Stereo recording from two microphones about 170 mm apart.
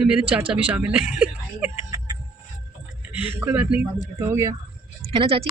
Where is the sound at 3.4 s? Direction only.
10° right (ahead or behind).